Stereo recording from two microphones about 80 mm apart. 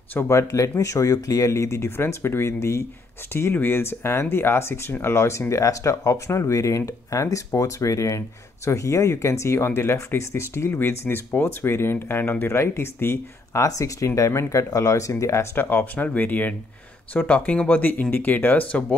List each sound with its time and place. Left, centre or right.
0.1 s speech: left
13.6 s speech: left
15.5 s speech: left